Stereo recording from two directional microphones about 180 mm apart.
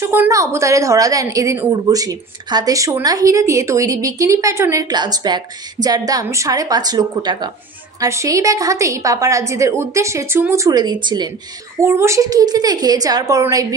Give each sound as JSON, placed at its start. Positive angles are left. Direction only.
{"t": 0.0, "sound": "a woman's voice", "side_deg": -15}
{"t": 11.8, "sound": "a woman's voice", "side_deg": -15}